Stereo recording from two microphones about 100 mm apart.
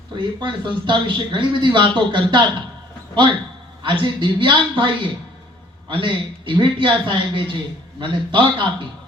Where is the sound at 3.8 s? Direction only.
55° right (ahead or behind).